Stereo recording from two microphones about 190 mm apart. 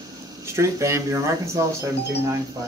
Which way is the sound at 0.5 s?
15° right (ahead or behind).